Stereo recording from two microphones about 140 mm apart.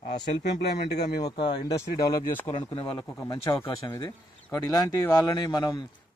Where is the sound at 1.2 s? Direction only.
30° left (ahead or behind).